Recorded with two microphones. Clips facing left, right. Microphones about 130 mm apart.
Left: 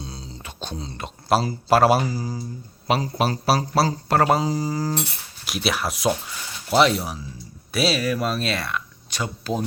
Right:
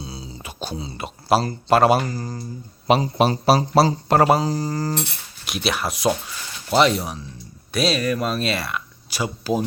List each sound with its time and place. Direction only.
0.0 s speech: 5° right (ahead or behind)
2.8 s a man's voice: 20° right (ahead or behind)
4.3 s speech: centre (ahead or behind)